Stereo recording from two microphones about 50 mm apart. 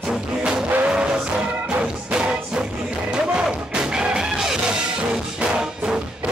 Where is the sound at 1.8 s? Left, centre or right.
Centre.